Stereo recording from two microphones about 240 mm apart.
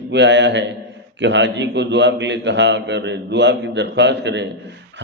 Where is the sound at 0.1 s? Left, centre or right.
Right.